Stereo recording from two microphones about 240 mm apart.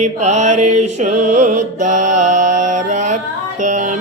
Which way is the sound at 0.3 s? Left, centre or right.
Right.